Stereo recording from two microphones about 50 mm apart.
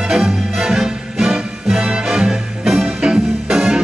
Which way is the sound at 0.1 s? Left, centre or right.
Centre.